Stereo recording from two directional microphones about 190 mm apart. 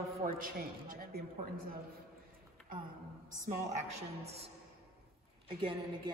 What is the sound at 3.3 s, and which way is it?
A woman's voice, 45° right (ahead or behind).